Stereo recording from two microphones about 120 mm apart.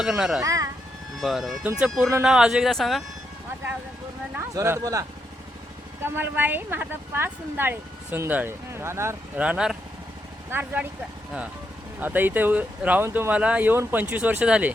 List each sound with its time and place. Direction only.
0.0 s speech: 5° right (ahead or behind)
0.4 s speech: 30° right (ahead or behind)
1.2 s speech: centre (ahead or behind)
4.5 s speech: 25° right (ahead or behind)
9.4 s speech: 10° right (ahead or behind)
11.9 s speech: 15° right (ahead or behind)